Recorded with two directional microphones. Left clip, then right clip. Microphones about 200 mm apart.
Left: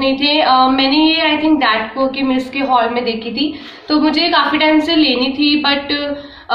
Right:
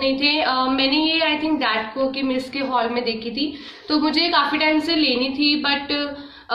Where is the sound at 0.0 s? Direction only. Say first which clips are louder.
Left 6 dB; 5° right (ahead or behind).